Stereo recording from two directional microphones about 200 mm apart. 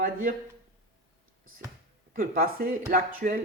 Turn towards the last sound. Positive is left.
turn(degrees=-45)  # may be behind; listen again after turning